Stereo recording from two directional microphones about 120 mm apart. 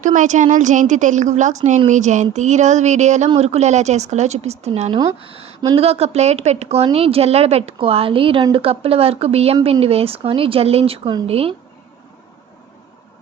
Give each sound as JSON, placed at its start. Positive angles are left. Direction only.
{"t": 0.0, "sound": "a woman's voice", "side_deg": -90}
{"t": 3.3, "sound": "a woman's voice", "side_deg": -65}